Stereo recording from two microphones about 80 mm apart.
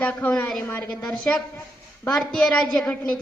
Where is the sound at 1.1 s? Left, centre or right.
Centre.